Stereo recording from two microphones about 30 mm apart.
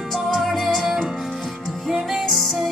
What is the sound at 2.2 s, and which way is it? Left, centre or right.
Music, centre.